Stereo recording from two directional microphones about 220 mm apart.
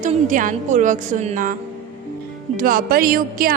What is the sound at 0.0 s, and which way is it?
Speech, 35° right (ahead or behind).